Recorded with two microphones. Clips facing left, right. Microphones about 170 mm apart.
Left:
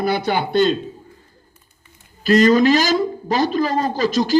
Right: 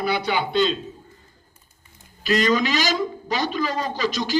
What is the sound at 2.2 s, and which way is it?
A man's voice, 45° left (ahead or behind).